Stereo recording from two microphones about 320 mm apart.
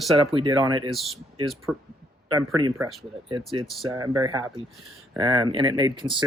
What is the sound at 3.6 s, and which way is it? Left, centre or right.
Speech, centre.